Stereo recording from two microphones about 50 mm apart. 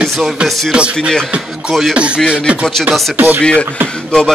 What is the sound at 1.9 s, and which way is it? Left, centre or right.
Speech, right.